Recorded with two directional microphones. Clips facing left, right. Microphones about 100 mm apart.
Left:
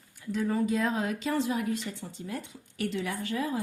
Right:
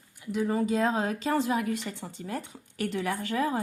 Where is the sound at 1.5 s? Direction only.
65° right (ahead or behind).